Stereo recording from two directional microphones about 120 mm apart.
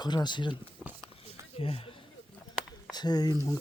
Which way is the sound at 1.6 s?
50° left (ahead or behind).